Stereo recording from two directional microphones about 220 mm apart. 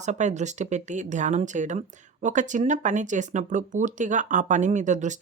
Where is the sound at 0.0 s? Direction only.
30° right (ahead or behind).